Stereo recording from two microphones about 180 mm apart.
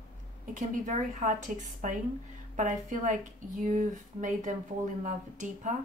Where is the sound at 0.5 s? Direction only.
45° right (ahead or behind).